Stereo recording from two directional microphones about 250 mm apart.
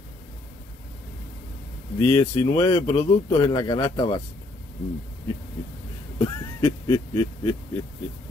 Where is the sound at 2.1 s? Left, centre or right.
Centre.